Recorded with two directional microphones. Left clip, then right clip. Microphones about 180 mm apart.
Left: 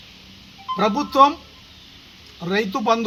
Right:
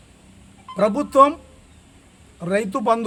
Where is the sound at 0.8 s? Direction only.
30° right (ahead or behind).